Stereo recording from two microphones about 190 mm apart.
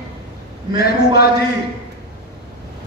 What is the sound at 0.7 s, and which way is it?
Speech, 55° left (ahead or behind).